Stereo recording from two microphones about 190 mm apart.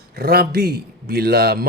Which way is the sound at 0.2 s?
55° right (ahead or behind).